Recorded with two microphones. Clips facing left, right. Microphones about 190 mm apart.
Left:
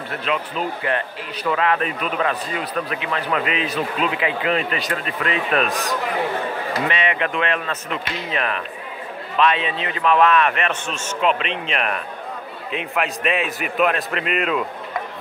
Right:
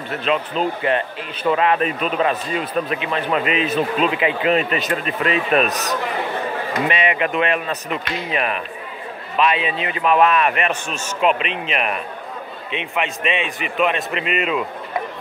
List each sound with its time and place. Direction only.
0.2 s speech: 25° right (ahead or behind)
6.9 s a man's voice: 15° right (ahead or behind)